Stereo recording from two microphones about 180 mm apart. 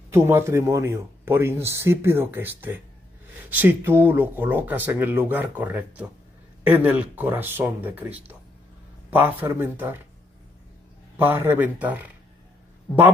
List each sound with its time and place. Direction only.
0.1 s speech: 15° right (ahead or behind)
11.1 s speech: 10° right (ahead or behind)